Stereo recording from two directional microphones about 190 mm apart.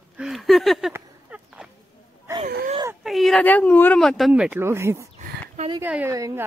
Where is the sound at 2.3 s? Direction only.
15° right (ahead or behind).